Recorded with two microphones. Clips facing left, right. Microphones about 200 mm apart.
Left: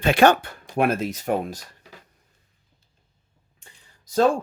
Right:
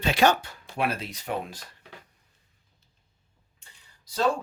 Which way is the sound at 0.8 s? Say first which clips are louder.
Left 7 dB; 50° left (ahead or behind).